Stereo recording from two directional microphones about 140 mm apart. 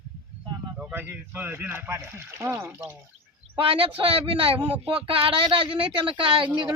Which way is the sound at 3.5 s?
40° right (ahead or behind).